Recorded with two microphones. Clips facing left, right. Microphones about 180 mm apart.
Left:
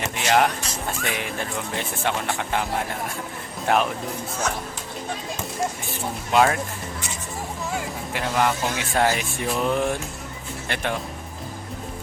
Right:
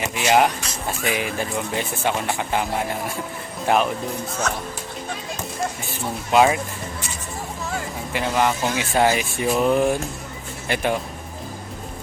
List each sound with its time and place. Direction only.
0.0 s speech: 5° right (ahead or behind)
6.3 s speech: 10° right (ahead or behind)
8.1 s speech: centre (ahead or behind)
10.7 s a sound: 5° right (ahead or behind)